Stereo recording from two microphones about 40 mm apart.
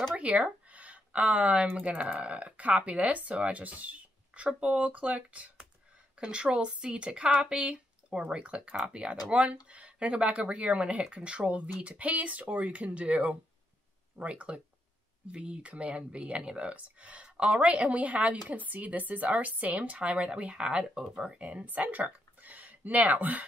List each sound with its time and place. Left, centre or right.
0.1 s speech: right
1.7 s speech: right
2.1 s speech: right
17.2 s a sound: right
17.6 s speech: right
21.5 s speech: right